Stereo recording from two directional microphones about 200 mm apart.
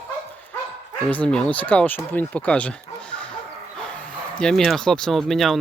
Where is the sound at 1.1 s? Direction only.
5° left (ahead or behind).